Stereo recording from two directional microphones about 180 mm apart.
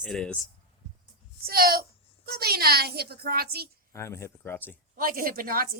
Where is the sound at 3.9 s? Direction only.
15° left (ahead or behind).